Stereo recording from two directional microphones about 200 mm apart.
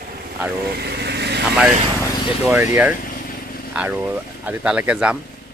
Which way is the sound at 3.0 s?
45° left (ahead or behind).